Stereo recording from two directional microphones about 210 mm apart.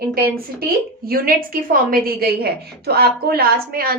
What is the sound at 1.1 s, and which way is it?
A woman's voice, 45° right (ahead or behind).